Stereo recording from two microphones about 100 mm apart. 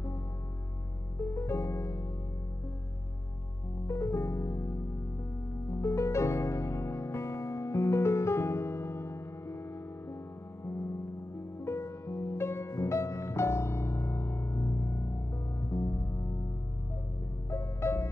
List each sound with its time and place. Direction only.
1.3 s music: 30° left (ahead or behind)
3.8 s music: 30° left (ahead or behind)
11.6 s music: 25° left (ahead or behind)
17.5 s music: 30° left (ahead or behind)